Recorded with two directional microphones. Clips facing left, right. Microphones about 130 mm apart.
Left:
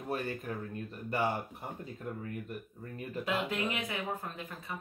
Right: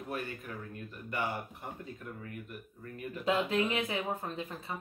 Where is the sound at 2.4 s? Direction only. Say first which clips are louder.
Left 3 dB; 35° left (ahead or behind).